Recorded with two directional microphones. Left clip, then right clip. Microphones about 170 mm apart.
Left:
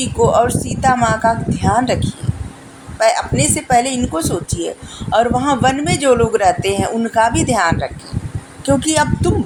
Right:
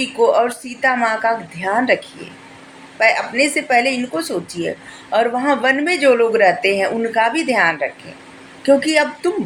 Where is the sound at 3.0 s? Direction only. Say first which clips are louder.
Even; 45° left (ahead or behind).